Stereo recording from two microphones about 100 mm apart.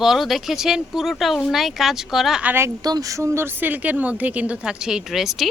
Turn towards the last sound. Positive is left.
turn(degrees=-5)  # may be behind; listen again after turning